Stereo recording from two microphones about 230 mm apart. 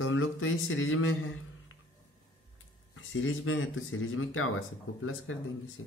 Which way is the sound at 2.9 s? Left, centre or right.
Left.